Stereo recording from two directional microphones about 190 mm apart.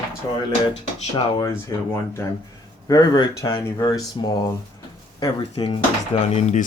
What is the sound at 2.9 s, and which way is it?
Speech, 20° left (ahead or behind).